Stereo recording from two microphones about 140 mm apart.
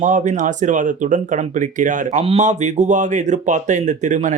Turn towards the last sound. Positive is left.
turn(degrees=-60)  # may be behind; listen again after turning